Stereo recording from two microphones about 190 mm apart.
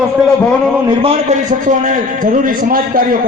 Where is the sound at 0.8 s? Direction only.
35° right (ahead or behind).